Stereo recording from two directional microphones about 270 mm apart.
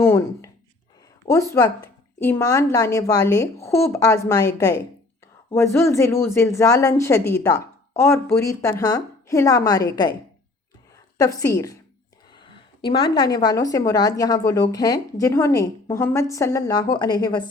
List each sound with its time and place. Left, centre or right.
0.0 s a sound: centre
1.2 s speech: centre
11.2 s speech: centre